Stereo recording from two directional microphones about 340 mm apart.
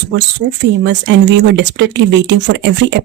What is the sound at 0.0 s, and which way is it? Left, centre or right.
Speech, right.